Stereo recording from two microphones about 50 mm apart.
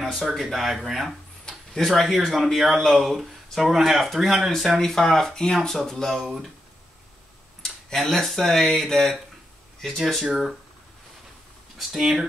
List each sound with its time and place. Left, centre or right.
0.0 s speech: centre
7.6 s speech: centre
10.2 s speech: centre
11.9 s speech: centre